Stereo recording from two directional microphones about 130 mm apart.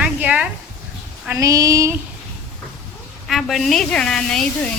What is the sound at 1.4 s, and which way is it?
Child singing, 25° right (ahead or behind).